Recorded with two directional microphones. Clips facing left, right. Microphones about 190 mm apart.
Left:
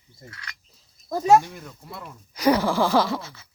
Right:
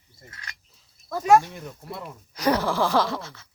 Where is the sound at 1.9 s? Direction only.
Centre (ahead or behind).